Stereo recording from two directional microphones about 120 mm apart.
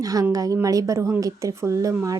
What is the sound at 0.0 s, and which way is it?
A woman's voice, 30° right (ahead or behind).